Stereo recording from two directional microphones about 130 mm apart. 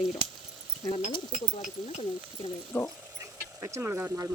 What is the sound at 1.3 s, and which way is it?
Speech, 70° left (ahead or behind).